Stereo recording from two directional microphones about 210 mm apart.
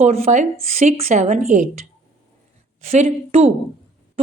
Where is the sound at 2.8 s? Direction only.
30° right (ahead or behind).